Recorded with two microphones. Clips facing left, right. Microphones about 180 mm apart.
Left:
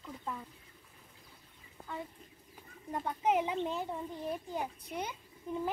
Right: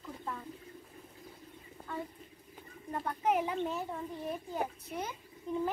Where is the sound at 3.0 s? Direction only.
20° left (ahead or behind).